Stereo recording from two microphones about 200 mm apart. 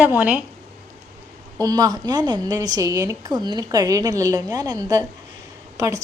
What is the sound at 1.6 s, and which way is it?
A woman's voice, 20° right (ahead or behind).